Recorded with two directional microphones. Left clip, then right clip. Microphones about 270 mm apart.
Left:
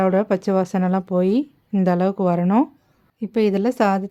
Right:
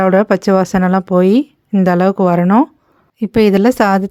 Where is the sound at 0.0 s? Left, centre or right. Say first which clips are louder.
Right 7 dB; centre.